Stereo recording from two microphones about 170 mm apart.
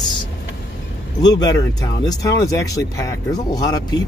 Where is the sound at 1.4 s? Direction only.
20° left (ahead or behind).